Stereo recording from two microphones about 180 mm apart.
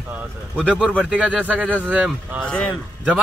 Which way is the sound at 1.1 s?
5° right (ahead or behind).